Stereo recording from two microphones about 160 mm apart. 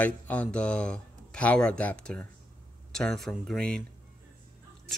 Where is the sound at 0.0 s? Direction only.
10° left (ahead or behind).